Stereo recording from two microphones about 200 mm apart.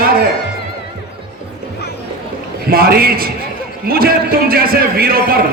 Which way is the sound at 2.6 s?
50° right (ahead or behind).